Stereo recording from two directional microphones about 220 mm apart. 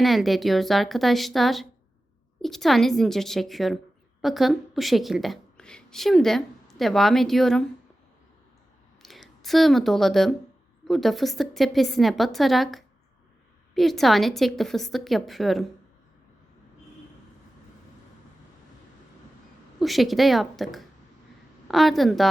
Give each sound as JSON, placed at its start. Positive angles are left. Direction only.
{"t": 0.0, "sound": "a woman's voice", "side_deg": 0}
{"t": 9.0, "sound": "a woman's voice", "side_deg": 0}
{"t": 19.8, "sound": "a woman's voice", "side_deg": 0}